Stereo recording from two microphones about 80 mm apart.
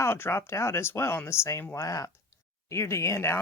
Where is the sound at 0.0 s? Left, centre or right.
Left.